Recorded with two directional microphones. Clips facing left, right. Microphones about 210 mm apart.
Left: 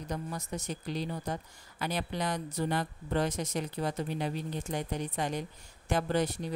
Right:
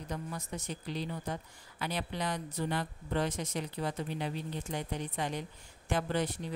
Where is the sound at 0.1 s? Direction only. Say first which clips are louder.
Left 3 dB; 40° left (ahead or behind).